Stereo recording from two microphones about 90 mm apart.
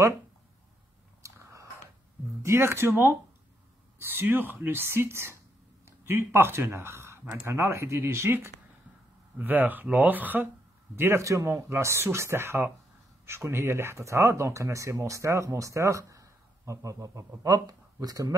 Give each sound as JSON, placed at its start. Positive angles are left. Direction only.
{"t": 1.2, "sound": "biting", "side_deg": -35}
{"t": 2.4, "sound": "speech", "side_deg": -30}
{"t": 11.0, "sound": "speech", "side_deg": -30}